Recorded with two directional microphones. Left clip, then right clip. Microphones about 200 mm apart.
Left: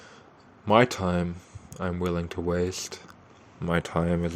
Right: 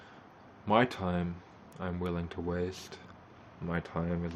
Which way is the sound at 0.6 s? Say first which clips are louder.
Left 7 dB; 35° left (ahead or behind).